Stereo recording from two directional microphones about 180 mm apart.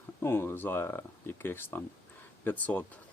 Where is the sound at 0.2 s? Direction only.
15° left (ahead or behind).